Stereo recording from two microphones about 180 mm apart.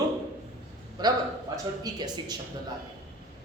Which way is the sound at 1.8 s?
25° right (ahead or behind).